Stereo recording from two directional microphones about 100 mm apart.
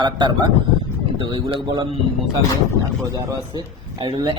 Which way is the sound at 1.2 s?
60° right (ahead or behind).